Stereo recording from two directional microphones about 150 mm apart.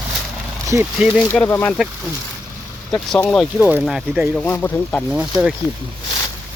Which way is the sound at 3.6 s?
10° right (ahead or behind).